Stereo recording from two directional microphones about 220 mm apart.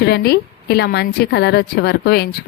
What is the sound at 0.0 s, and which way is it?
A woman's voice, 45° left (ahead or behind).